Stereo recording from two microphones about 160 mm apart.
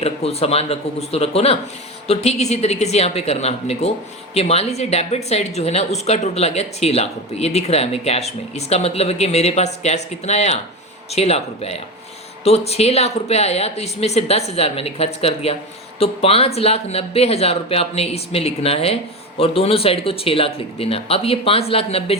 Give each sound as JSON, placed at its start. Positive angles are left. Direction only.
{"t": 0.0, "sound": "speech", "side_deg": 40}